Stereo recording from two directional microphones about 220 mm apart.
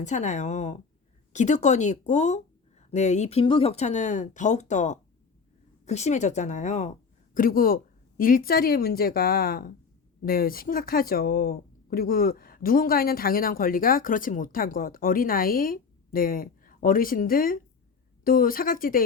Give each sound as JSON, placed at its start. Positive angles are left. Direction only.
{"t": 0.0, "sound": "a woman's voice", "side_deg": 30}